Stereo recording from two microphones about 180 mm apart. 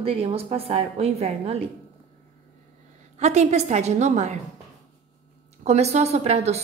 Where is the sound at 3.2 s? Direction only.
40° right (ahead or behind).